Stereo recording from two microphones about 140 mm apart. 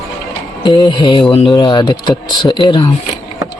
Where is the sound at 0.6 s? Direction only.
30° left (ahead or behind).